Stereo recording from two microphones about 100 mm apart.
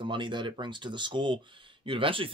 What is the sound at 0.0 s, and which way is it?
Speech, 55° right (ahead or behind).